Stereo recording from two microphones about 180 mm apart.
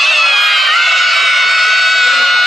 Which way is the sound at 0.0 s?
Centre (ahead or behind).